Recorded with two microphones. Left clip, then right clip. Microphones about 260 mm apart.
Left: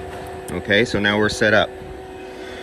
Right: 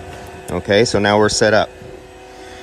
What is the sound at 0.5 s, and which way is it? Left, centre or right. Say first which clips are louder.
Speech: right 4 dB; centre.